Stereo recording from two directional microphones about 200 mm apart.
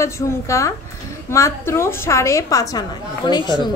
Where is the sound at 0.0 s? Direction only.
15° left (ahead or behind).